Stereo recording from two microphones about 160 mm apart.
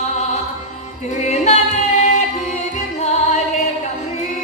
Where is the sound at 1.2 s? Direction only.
45° left (ahead or behind).